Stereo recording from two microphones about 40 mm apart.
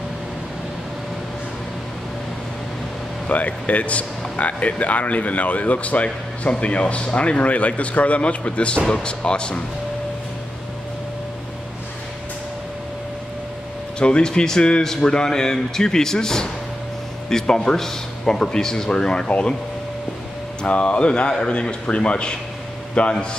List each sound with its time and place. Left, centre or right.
3.3 s speech: left
8.8 s a man's voice: centre
13.9 s speech: left
20.6 s a man's voice: left